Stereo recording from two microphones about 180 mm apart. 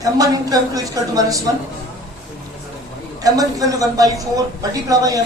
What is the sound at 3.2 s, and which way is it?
A woman's voice, 20° right (ahead or behind).